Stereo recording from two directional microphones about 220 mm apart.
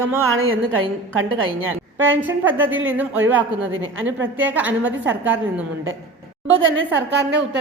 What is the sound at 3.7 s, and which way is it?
Speech, 65° right (ahead or behind).